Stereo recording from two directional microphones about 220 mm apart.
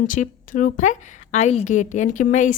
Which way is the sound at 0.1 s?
35° left (ahead or behind).